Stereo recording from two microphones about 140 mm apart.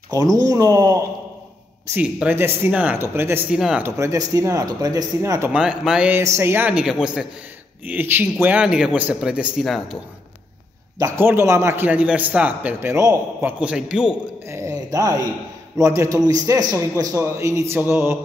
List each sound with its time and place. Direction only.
0.1 s speech: 25° right (ahead or behind)
2.0 s a man's voice: 10° right (ahead or behind)
3.5 s speech: 5° right (ahead or behind)
3.8 s speech: 20° right (ahead or behind)
5.5 s a man's voice: 5° right (ahead or behind)
11.0 s a man's voice: 20° right (ahead or behind)
14.5 s a sound: 25° right (ahead or behind)
15.8 s a man's voice: 20° right (ahead or behind)